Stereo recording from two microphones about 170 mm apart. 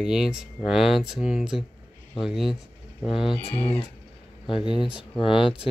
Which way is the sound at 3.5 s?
35° left (ahead or behind).